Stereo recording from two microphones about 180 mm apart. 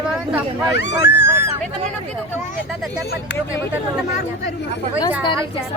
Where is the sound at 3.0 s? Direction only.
65° left (ahead or behind).